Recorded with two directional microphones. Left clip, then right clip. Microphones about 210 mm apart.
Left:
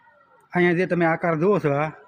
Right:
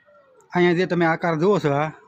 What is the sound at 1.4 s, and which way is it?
Speech, 15° right (ahead or behind).